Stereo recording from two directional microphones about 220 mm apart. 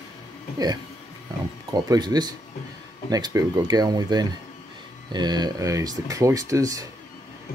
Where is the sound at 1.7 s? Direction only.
15° right (ahead or behind).